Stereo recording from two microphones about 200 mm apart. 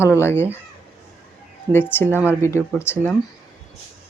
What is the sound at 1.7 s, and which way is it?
A woman's voice, 10° left (ahead or behind).